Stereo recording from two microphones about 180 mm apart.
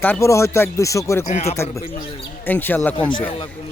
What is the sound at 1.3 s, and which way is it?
Speech, 40° left (ahead or behind).